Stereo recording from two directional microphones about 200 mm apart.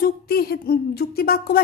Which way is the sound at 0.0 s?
50° left (ahead or behind).